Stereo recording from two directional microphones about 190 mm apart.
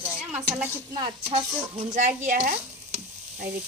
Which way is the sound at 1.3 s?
40° right (ahead or behind).